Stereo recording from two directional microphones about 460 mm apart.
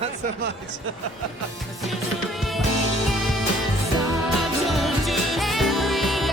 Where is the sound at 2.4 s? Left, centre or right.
Centre.